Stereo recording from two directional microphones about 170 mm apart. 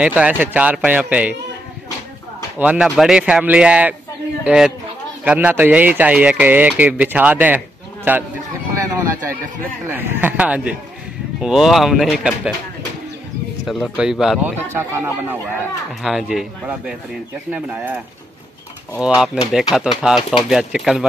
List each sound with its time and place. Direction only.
0.0 s speech: 10° right (ahead or behind)
2.6 s speech: 5° right (ahead or behind)
13.7 s speech: 5° right (ahead or behind)
14.7 s speech: 15° right (ahead or behind)
16.0 s speech: centre (ahead or behind)